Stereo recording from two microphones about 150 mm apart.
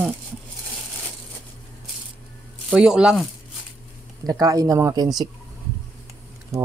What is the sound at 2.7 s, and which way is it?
Speech, 5° right (ahead or behind).